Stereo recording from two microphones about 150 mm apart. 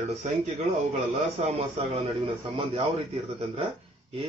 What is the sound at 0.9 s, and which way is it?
A man's voice, 45° right (ahead or behind).